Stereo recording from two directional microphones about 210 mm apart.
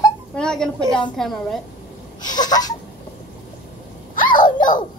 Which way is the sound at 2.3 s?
20° left (ahead or behind).